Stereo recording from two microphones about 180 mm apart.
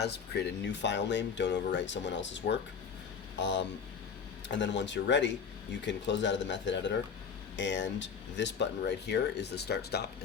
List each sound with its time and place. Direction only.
0.0 s speech: 65° left (ahead or behind)